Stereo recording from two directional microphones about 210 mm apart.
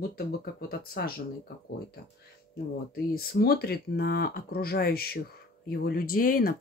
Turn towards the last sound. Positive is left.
turn(degrees=45)  # may be behind; listen again after turning